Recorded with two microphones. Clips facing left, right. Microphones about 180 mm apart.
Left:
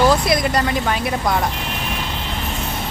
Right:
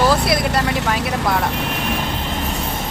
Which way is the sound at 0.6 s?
80° right.